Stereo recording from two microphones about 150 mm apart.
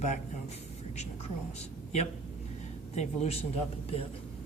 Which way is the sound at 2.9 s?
45° left (ahead or behind).